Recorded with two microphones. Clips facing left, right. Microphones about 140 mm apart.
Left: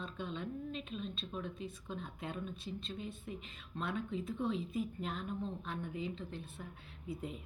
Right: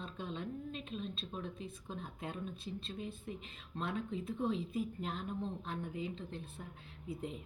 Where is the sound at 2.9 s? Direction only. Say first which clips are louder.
Right 1 dB; 25° left (ahead or behind).